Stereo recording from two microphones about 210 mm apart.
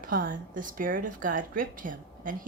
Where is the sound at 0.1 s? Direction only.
40° right (ahead or behind).